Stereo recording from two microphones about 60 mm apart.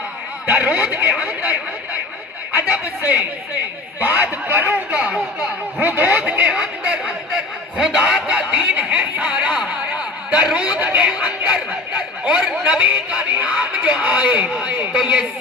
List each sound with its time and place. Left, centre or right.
0.5 s speech: right
4.0 s speech: right
4.9 s speech: centre
5.8 s speech: right
7.7 s speech: centre
8.3 s a man's voice: centre
15.0 s speech: centre